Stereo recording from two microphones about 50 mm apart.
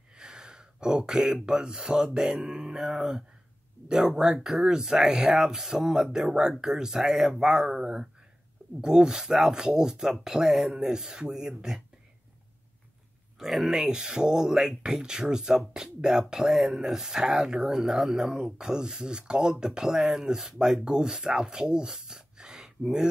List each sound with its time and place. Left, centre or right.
0.1 s speech: centre
13.4 s speech: centre